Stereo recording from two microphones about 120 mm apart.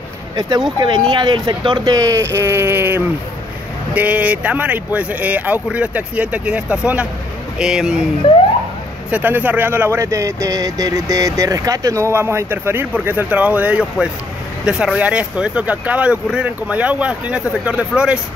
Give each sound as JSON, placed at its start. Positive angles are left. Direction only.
{"t": 0.7, "sound": "speech", "side_deg": -40}
{"t": 9.1, "sound": "speech", "side_deg": -15}